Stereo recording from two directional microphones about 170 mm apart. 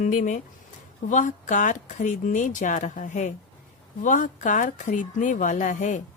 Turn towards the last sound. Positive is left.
turn(degrees=50)  # may be behind; listen again after turning